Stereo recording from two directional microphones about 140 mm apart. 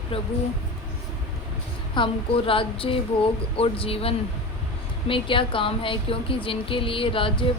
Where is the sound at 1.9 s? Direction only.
35° left (ahead or behind).